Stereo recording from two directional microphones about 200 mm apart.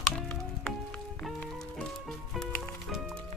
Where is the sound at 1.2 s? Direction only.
5° left (ahead or behind).